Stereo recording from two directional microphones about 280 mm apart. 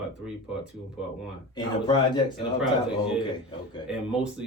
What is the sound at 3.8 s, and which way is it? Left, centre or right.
Speech, centre.